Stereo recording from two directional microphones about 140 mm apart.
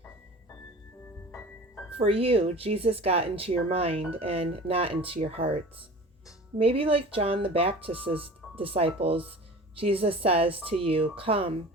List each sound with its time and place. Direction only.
2.0 s speech: 45° right (ahead or behind)
6.6 s speech: 40° right (ahead or behind)